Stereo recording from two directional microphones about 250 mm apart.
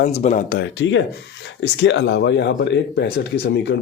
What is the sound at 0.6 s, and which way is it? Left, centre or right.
Speech, left.